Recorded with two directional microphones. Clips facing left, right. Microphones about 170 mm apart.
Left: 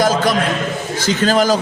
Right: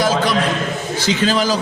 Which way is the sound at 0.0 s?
45° left (ahead or behind).